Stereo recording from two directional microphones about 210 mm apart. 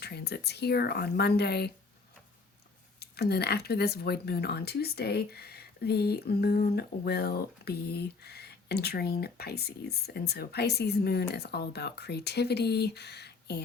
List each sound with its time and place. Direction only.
0.0 s speech: 50° left (ahead or behind)
3.0 s speech: 50° left (ahead or behind)